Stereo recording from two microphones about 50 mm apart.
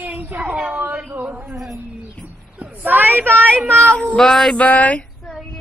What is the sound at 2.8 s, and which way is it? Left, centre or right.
Speech, right.